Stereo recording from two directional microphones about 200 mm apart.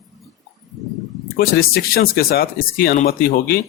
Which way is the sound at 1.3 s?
50° left (ahead or behind).